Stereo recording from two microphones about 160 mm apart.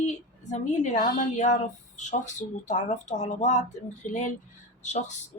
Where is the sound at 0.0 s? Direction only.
45° left (ahead or behind).